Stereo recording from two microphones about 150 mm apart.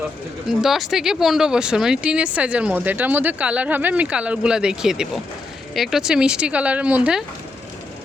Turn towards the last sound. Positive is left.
turn(degrees=-5)  # may be behind; listen again after turning